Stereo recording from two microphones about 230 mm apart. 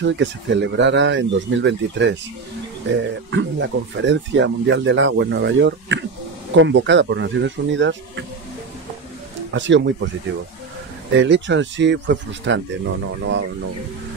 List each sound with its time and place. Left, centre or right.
0.0 s speech: right
9.5 s speech: right
11.1 s speech: right